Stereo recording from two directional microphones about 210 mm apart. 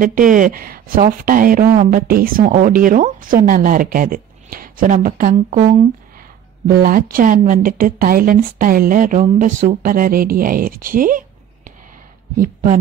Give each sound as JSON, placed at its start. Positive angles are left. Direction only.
{"t": 0.0, "sound": "a woman's voice", "side_deg": -40}